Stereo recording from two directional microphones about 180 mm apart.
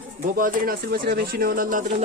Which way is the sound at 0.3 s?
50° right (ahead or behind).